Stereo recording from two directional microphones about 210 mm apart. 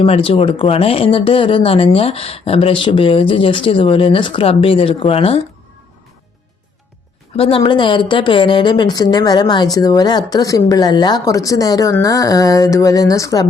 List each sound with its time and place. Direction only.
0.0 s speech: 25° left (ahead or behind)
7.3 s speech: 25° left (ahead or behind)